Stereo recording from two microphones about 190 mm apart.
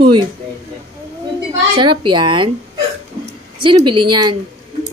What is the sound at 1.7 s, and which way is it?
Speech, 25° right (ahead or behind).